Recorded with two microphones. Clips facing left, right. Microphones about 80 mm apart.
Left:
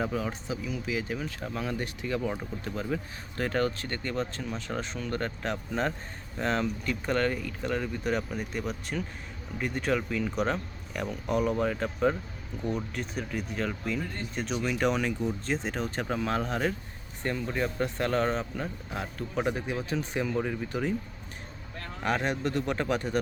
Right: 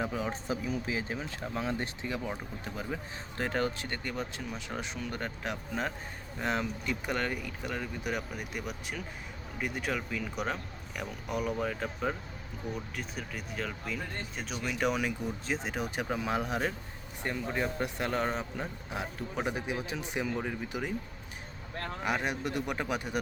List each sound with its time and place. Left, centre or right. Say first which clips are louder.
0.0 s speech: left 2 dB; centre
0.4 s speech: even; right; by 20.9 s centre
22.0 s speech: left 4 dB; centre